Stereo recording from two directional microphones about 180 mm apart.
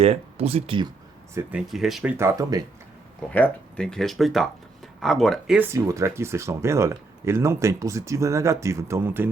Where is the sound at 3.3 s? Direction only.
10° left (ahead or behind).